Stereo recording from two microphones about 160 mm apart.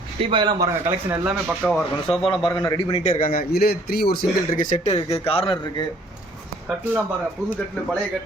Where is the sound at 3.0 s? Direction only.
55° left (ahead or behind); by 5.8 s 30° left (ahead or behind).